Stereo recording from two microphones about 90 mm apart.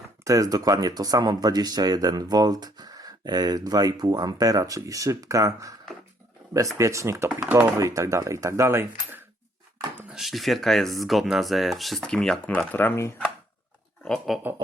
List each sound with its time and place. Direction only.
0.3 s speech: 40° right (ahead or behind)
6.7 s speech: 35° right (ahead or behind)
10.1 s speech: centre (ahead or behind); by 13.1 s 25° left (ahead or behind)
14.3 s speech: centre (ahead or behind)